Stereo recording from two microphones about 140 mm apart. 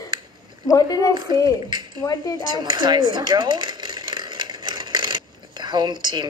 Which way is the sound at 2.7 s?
30° right (ahead or behind).